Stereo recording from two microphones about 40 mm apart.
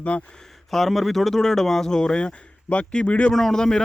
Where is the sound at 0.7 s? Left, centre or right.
Centre; by 3.1 s left.